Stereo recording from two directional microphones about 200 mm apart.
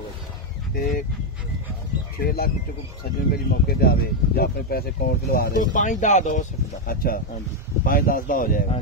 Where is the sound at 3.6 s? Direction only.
50° left (ahead or behind).